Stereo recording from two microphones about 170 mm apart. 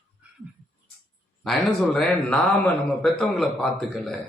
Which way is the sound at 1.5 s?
5° left (ahead or behind).